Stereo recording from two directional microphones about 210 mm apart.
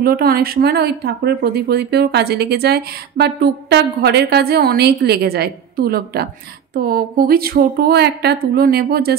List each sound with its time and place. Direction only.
0.0 s speech: 45° right (ahead or behind)